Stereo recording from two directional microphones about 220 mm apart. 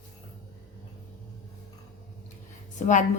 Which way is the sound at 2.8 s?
35° left (ahead or behind).